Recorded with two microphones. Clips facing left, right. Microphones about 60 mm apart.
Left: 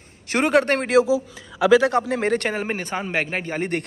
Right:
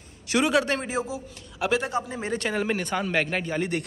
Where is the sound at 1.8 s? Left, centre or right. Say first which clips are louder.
Left 9 dB; left.